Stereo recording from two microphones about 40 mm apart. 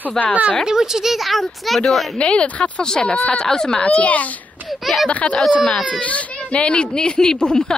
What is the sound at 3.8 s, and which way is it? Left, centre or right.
Speech, left.